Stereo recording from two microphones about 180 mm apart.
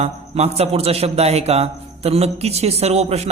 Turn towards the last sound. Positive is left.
turn(degrees=-35)  # may be behind; listen again after turning